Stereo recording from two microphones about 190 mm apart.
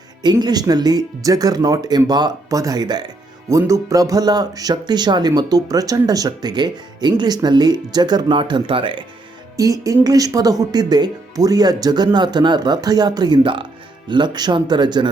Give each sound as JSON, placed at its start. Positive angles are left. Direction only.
{"t": 0.2, "sound": "speech", "side_deg": -20}